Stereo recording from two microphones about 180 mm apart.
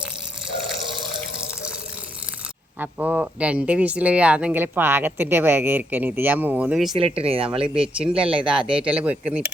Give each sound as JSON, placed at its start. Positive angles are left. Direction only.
{"t": 2.7, "sound": "speech", "side_deg": -10}
{"t": 7.0, "sound": "speech", "side_deg": -30}
{"t": 8.4, "sound": "speech", "side_deg": -5}